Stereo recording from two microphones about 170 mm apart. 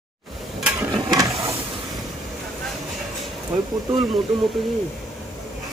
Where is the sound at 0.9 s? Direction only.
20° right (ahead or behind).